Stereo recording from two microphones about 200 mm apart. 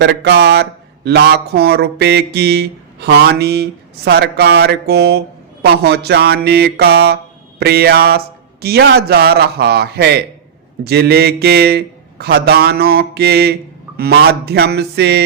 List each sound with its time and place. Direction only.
0.0 s speech: 55° right (ahead or behind)